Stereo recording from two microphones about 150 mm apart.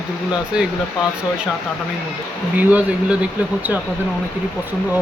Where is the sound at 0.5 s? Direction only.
5° right (ahead or behind).